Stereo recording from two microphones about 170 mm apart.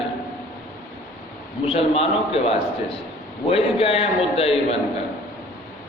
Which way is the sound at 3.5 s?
35° left (ahead or behind).